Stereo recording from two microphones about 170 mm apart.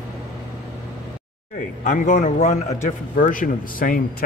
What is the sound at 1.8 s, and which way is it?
Speech, 50° left (ahead or behind).